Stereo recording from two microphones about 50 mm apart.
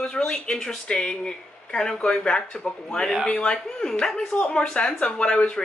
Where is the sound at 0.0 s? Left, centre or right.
Centre.